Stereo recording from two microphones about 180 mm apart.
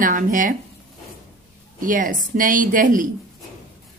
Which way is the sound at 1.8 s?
50° right (ahead or behind).